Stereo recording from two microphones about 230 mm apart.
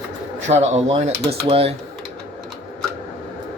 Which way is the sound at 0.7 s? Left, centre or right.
Right.